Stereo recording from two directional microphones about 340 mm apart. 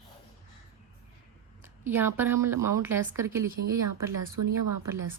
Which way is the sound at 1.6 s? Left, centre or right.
Centre.